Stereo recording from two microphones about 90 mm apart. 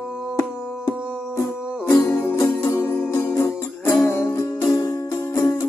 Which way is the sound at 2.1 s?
30° left (ahead or behind).